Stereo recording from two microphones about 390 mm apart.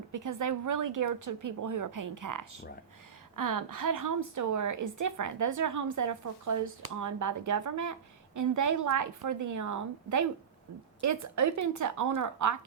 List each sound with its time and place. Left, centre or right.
0.1 s a woman's voice: right